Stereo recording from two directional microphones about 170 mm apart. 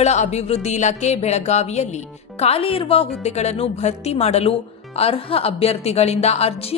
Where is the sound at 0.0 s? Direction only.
40° left (ahead or behind).